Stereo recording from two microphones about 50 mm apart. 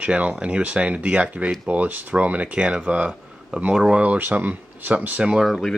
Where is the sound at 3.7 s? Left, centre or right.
Centre.